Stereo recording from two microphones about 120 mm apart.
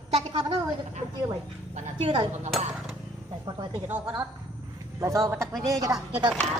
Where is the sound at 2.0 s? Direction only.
45° right (ahead or behind).